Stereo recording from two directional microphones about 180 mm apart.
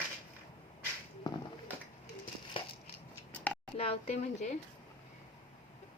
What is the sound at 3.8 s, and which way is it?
Speech, 35° left (ahead or behind).